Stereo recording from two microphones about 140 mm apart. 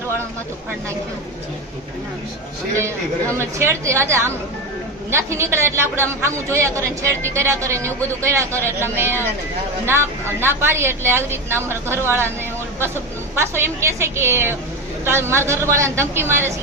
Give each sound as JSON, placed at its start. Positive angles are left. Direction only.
{"t": 3.4, "sound": "a woman's voice", "side_deg": -20}